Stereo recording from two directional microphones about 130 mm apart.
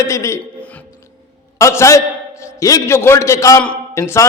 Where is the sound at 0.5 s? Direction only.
10° left (ahead or behind).